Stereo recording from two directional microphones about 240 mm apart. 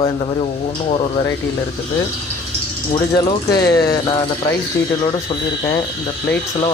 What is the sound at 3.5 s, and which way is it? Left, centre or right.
Speech, left.